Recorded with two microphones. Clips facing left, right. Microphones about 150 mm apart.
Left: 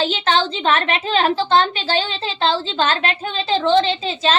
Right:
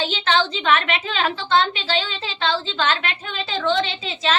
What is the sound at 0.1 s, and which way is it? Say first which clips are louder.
A woman's voice: left 2 dB; 35° left (ahead or behind).